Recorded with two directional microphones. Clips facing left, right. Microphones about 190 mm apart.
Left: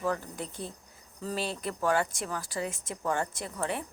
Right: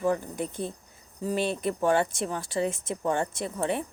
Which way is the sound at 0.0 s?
20° right (ahead or behind).